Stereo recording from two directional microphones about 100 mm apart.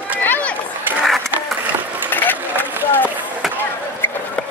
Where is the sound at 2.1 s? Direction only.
20° left (ahead or behind).